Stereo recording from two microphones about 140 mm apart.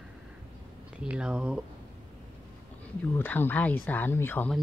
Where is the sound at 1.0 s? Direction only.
5° right (ahead or behind).